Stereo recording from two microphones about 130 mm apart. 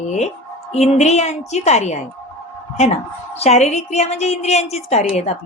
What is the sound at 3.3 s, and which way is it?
A woman's voice, 55° left (ahead or behind).